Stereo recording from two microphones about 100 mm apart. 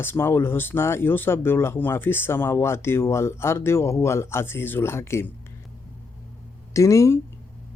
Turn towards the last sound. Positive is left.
turn(degrees=30)  # may be behind; listen again after turning